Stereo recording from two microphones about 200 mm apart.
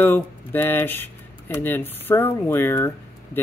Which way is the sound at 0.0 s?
10° left (ahead or behind).